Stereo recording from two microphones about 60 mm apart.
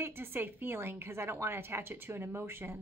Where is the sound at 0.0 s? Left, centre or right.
Right.